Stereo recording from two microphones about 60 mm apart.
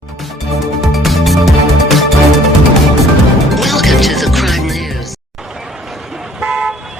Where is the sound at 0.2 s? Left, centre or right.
Centre.